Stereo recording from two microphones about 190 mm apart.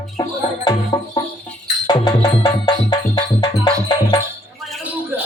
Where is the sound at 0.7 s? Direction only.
20° left (ahead or behind).